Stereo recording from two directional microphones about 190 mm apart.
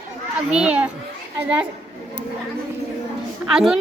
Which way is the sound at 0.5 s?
5° right (ahead or behind).